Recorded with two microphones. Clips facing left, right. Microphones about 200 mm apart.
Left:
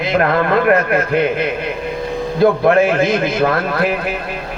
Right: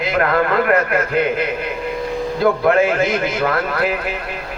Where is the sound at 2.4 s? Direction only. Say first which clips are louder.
Left 3 dB; 25° left (ahead or behind).